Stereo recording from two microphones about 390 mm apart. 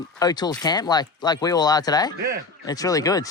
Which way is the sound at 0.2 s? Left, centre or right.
Centre.